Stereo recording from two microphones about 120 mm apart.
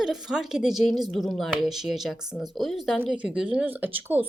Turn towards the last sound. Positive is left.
turn(degrees=-15)  # may be behind; listen again after turning